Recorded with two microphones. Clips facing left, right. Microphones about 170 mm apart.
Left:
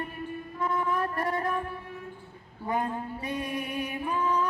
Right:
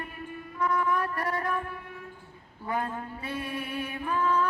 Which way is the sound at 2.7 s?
20° left (ahead or behind).